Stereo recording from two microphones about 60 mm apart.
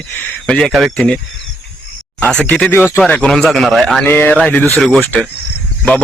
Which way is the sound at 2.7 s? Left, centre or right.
Left.